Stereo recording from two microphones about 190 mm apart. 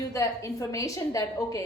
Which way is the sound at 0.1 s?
15° left (ahead or behind).